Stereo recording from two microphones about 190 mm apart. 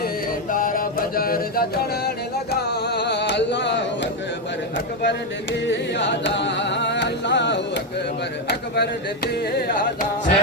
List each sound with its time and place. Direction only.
0.5 s music: 45° left (ahead or behind); by 4.1 s 65° left (ahead or behind)
5.0 s carnatic music: 70° left (ahead or behind); by 10.3 s 45° left (ahead or behind)